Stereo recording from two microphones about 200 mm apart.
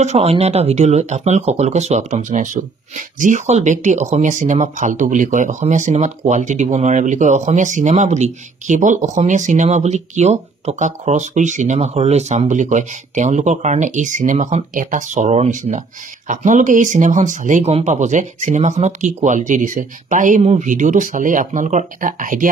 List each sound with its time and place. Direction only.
0.0 s speech: 30° right (ahead or behind)